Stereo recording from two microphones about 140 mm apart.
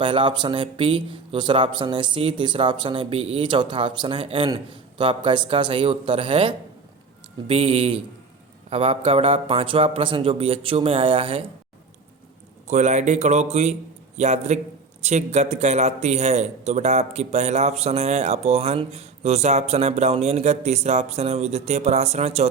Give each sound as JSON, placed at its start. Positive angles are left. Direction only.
{"t": 0.0, "sound": "a man's voice", "side_deg": -35}
{"t": 12.6, "sound": "a man's voice", "side_deg": -55}